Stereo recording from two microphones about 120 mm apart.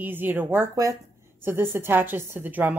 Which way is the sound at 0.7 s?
30° right (ahead or behind).